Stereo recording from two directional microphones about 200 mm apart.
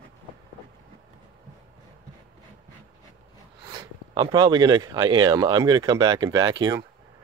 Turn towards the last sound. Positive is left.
turn(degrees=-20)  # may be behind; listen again after turning